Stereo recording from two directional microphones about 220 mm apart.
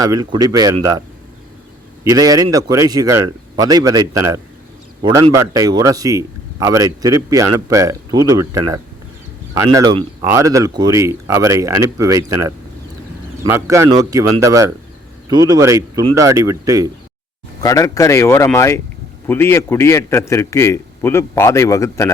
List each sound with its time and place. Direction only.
0.0 s speech: 15° right (ahead or behind)
2.0 s speech: 15° right (ahead or behind)
17.6 s a man's voice: 15° left (ahead or behind)